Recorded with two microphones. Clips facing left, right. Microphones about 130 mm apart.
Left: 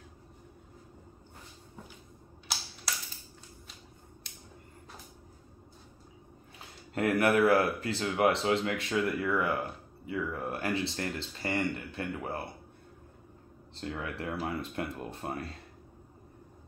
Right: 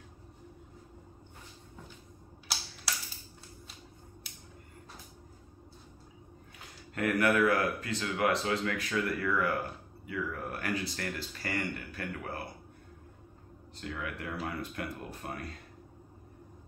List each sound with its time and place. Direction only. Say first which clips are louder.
2.4 s a sound: left 1 dB; centre (ahead or behind)
4.2 s scissors: even; 5° right (ahead or behind)
7.0 s speech: left 2 dB; 25° left (ahead or behind)
13.7 s speech: left 2 dB; 30° left (ahead or behind)